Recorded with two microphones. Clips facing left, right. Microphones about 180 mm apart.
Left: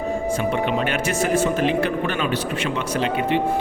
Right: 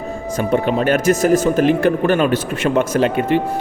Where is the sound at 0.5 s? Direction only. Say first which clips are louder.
Right 6 dB; 40° right (ahead or behind).